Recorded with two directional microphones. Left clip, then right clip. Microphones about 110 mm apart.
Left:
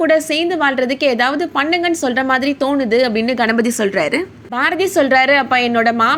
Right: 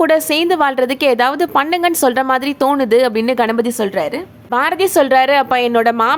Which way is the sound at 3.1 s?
35° right (ahead or behind).